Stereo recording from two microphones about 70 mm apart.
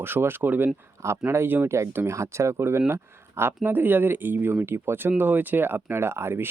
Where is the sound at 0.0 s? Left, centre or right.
Right.